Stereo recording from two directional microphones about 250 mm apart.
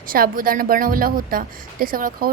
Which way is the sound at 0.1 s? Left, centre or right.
Right.